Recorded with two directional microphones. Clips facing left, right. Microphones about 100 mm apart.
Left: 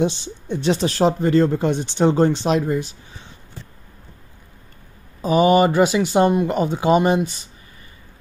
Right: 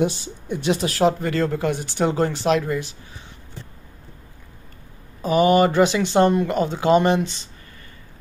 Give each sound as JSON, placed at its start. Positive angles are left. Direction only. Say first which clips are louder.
{"t": 0.0, "sound": "speech", "louder": "left 1 dB", "side_deg": 25}
{"t": 5.2, "sound": "speech", "louder": "left 1 dB", "side_deg": 20}